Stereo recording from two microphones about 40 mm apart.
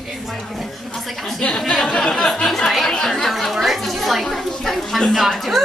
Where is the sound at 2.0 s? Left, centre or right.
Centre.